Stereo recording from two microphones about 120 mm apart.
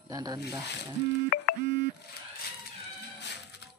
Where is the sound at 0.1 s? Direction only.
35° right (ahead or behind).